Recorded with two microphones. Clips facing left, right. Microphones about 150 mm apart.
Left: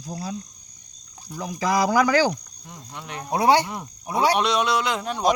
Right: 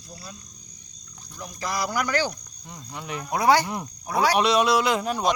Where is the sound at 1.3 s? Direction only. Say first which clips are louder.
Left 8 dB; 90° left.